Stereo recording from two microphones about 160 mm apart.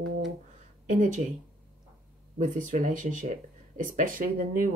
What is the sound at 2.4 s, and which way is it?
Speech, 55° right (ahead or behind).